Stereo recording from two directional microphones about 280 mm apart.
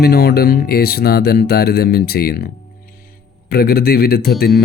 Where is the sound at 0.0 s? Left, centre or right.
Left.